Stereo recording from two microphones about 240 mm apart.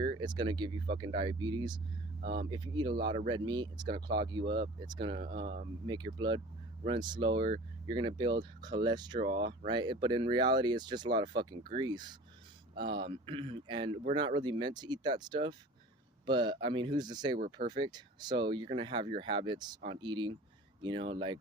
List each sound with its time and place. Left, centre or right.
0.0 s speech: centre
2.2 s speech: right
2.5 s speech: centre
17.3 s speech: right
17.7 s speech: centre